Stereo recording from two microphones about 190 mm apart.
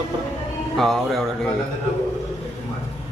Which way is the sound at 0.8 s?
Centre (ahead or behind).